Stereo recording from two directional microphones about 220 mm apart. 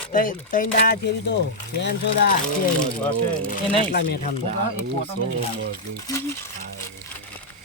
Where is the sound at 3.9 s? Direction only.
45° left (ahead or behind).